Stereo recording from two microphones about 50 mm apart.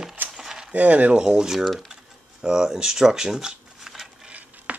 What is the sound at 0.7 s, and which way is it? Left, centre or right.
Speech, right.